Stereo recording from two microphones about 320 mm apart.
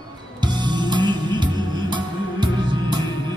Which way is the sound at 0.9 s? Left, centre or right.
Centre.